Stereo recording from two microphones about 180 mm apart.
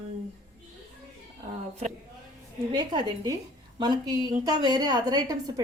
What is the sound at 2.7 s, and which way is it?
A woman's voice, 25° right (ahead or behind).